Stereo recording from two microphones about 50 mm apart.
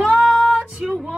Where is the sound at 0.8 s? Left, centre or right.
Centre.